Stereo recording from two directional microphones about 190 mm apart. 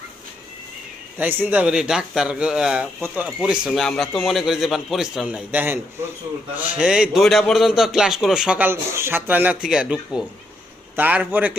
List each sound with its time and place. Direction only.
1.2 s a man's voice: 10° right (ahead or behind)